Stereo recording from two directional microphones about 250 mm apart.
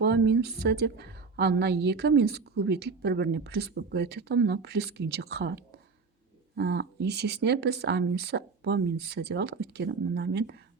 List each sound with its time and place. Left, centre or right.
0.0 s a woman's voice: right